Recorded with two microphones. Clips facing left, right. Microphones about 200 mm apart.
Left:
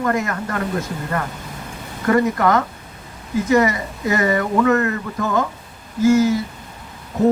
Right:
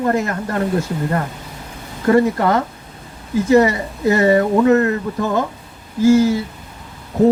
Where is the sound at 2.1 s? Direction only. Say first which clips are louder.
Right 2 dB; 30° right (ahead or behind).